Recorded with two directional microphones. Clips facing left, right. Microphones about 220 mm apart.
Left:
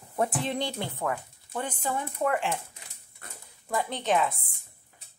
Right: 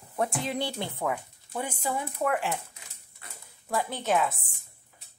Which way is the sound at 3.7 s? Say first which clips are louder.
Even; 5° right (ahead or behind).